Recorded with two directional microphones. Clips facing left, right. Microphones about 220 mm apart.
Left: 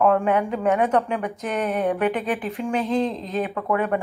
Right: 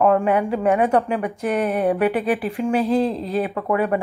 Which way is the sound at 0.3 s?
15° right (ahead or behind).